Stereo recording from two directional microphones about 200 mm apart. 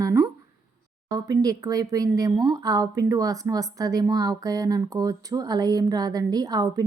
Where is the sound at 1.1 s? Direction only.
20° right (ahead or behind).